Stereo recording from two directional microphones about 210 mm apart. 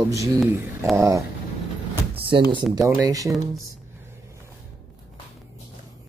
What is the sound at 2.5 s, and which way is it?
Speech, 25° right (ahead or behind).